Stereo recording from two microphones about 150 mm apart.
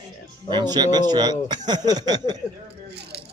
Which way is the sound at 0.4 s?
30° right (ahead or behind).